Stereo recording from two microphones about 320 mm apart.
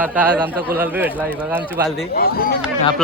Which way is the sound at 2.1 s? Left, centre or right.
Left.